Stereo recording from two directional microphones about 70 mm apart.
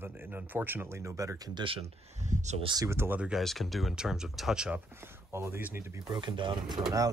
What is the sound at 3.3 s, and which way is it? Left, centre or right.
Speech, centre.